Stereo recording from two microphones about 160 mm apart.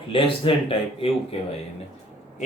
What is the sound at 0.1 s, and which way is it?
Speech, 35° left (ahead or behind).